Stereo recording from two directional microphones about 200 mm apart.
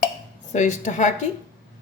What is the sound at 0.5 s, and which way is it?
Speech, 35° left (ahead or behind).